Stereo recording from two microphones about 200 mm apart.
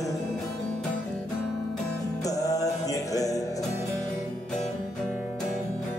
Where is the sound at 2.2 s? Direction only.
15° left (ahead or behind).